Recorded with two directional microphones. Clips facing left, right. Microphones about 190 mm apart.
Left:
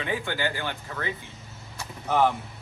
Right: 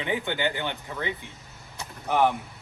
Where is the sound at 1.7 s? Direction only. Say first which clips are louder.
Even; 15° right (ahead or behind).